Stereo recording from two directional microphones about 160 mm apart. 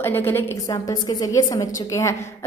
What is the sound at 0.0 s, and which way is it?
Speech, 15° left (ahead or behind).